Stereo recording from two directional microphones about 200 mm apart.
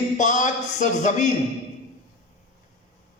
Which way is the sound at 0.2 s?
40° left (ahead or behind).